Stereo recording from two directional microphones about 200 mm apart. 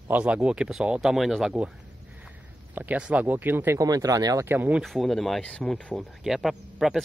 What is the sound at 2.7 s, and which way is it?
Speech, 10° right (ahead or behind).